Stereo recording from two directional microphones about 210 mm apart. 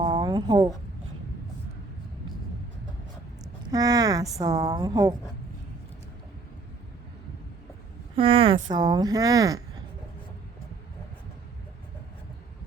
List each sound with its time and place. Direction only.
0.0 s a sound: 20° right (ahead or behind)
3.7 s a woman's voice: 15° right (ahead or behind)
8.1 s speech: 25° right (ahead or behind)